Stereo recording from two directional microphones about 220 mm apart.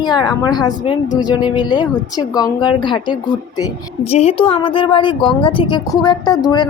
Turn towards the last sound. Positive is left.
turn(degrees=20)  # may be behind; listen again after turning